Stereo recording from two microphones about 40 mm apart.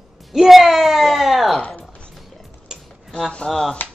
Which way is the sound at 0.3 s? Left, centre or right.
Centre.